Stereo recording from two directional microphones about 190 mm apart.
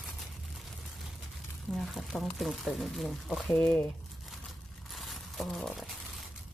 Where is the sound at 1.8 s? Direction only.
Centre (ahead or behind).